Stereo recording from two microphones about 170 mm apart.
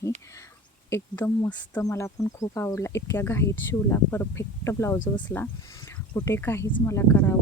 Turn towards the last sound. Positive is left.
turn(degrees=10)  # may be behind; listen again after turning